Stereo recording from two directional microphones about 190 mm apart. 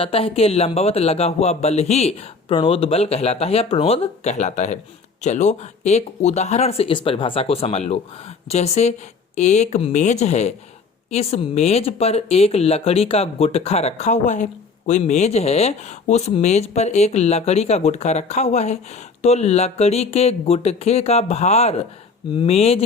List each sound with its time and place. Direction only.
0.0 s speech: 30° left (ahead or behind)